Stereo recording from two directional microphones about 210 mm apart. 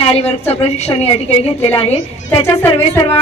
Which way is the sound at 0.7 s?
30° left (ahead or behind).